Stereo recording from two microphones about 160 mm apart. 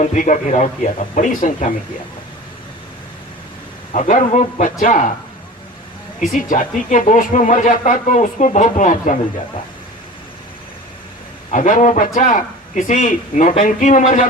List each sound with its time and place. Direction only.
0.0 s speech: 50° left (ahead or behind)
3.9 s speech: 50° left (ahead or behind)
6.3 s speech: 55° left (ahead or behind)
11.5 s speech: 50° left (ahead or behind)